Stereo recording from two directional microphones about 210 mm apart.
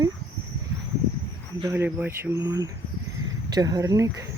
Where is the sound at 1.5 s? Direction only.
15° right (ahead or behind).